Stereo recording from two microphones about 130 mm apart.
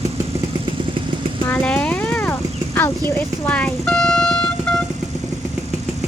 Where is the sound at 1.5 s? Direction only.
10° left (ahead or behind).